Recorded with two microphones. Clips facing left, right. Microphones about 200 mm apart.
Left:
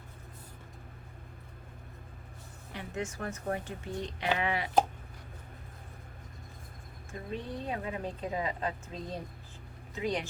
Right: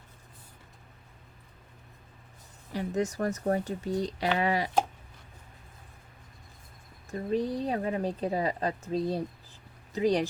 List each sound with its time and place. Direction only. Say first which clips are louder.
2.7 s a woman's voice: right 8 dB; 40° right (ahead or behind)
7.1 s a woman's voice: right 9 dB; 40° right (ahead or behind)